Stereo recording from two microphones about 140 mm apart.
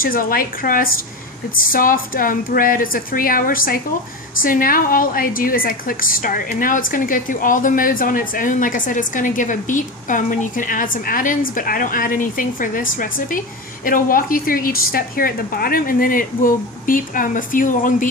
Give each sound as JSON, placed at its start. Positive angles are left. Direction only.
{"t": 0.0, "sound": "a woman's voice", "side_deg": 90}